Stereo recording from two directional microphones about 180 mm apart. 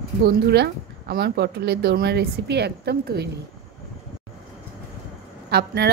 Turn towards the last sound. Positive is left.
turn(degrees=-65)  # may be behind; listen again after turning